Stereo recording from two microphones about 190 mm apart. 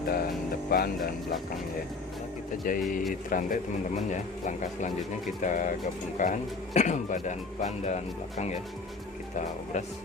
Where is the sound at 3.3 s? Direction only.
45° left (ahead or behind).